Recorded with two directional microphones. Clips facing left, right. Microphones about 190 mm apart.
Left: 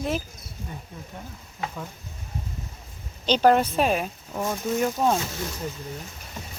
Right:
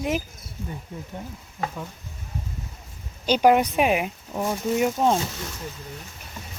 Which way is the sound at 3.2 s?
10° right (ahead or behind).